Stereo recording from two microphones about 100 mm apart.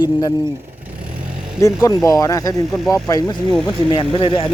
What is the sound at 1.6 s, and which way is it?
Speech, 35° left (ahead or behind).